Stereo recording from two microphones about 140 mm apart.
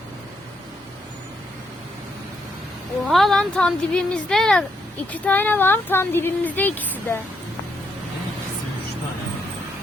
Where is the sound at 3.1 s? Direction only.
Centre (ahead or behind).